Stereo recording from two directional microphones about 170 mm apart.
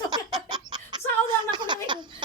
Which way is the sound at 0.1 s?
25° right (ahead or behind).